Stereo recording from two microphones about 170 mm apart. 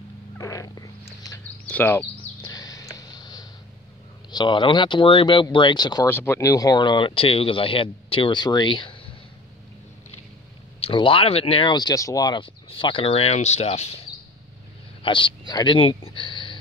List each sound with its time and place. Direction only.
0.4 s cat: 20° left (ahead or behind)
1.7 s speech: 10° left (ahead or behind)
2.4 s a sound: 20° left (ahead or behind)
4.3 s speech: 25° left (ahead or behind)
6.0 s speech: 15° left (ahead or behind); by 9.1 s 30° left (ahead or behind)
10.9 s speech: 30° left (ahead or behind)
14.1 s a sound: 25° left (ahead or behind)
15.0 s speech: 30° left (ahead or behind)